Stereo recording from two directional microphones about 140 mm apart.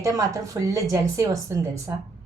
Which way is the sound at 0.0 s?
25° right (ahead or behind).